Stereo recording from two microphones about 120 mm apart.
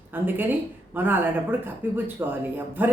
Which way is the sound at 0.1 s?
15° right (ahead or behind).